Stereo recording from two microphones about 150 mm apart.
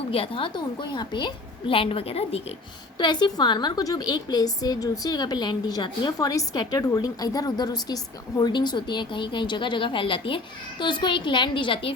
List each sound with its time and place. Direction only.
0.1 s speech: 35° left (ahead or behind)
3.0 s a woman's voice: 30° left (ahead or behind)